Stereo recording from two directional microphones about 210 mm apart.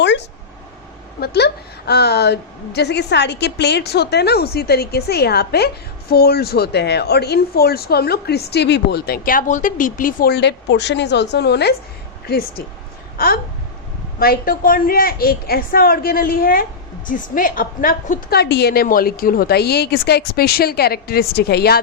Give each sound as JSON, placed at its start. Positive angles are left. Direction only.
{"t": 1.2, "sound": "a woman's voice", "side_deg": 50}
{"t": 13.1, "sound": "a sound", "side_deg": 45}
{"t": 14.2, "sound": "a woman's voice", "side_deg": 45}